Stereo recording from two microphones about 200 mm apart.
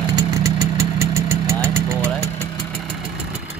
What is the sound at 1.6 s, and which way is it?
Engine, 10° right (ahead or behind).